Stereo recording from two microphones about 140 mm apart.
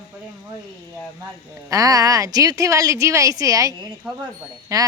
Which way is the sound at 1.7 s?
25° right (ahead or behind).